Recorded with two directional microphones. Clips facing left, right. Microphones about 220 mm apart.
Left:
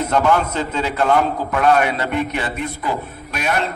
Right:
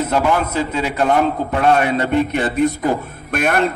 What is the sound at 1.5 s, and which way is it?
Speech, 30° right (ahead or behind).